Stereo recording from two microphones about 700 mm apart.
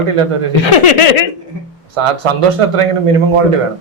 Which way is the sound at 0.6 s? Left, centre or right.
Left.